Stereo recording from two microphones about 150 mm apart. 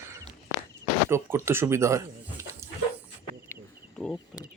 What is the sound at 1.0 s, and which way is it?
Speech, 15° right (ahead or behind).